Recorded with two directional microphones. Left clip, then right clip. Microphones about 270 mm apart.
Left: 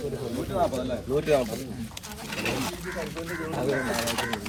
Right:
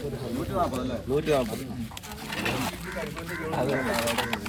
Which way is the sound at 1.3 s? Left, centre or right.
Centre.